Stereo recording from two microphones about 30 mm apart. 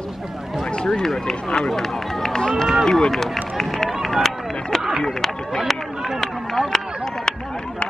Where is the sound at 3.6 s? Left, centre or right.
Centre.